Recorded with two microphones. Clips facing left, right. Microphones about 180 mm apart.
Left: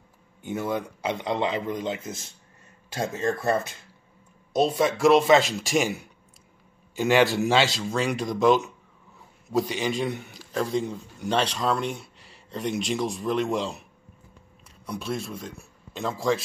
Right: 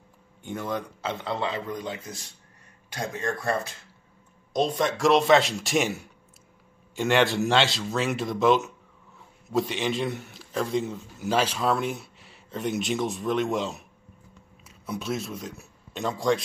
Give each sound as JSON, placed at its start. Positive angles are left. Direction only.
{"t": 0.4, "sound": "a man's voice", "side_deg": 10}
{"t": 4.5, "sound": "a man's voice", "side_deg": 5}
{"t": 14.9, "sound": "speech", "side_deg": 0}